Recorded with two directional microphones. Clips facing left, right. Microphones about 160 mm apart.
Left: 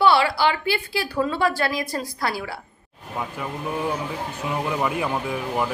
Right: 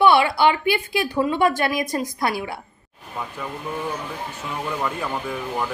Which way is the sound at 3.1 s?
10° left (ahead or behind).